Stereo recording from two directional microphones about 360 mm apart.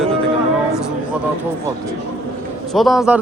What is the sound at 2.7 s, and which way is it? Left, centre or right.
Speech, centre.